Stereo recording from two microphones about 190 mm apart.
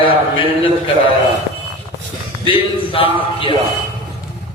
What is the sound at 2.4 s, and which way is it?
A man's voice, 30° left (ahead or behind).